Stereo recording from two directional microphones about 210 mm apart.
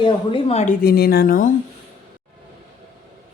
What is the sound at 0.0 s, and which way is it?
Speech, 25° left (ahead or behind).